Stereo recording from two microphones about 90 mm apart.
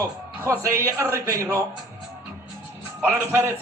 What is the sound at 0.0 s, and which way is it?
A man's voice, 35° right (ahead or behind).